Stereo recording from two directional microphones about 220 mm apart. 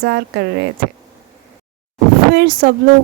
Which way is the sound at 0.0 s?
50° right (ahead or behind).